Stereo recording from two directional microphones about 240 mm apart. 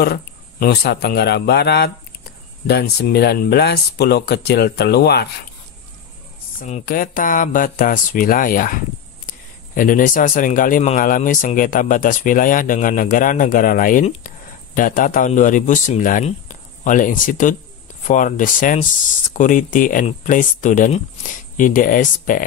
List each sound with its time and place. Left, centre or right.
0.0 s speech: left
6.6 s speech: left